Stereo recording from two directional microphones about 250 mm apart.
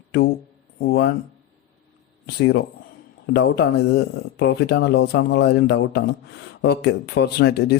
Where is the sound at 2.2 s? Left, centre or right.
Left.